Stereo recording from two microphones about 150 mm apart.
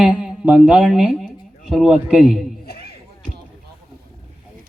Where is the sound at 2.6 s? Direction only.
90° left.